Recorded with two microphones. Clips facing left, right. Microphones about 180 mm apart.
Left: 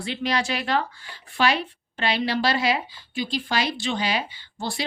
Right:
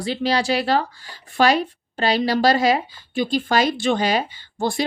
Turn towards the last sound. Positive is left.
turn(degrees=-50)  # may be behind; listen again after turning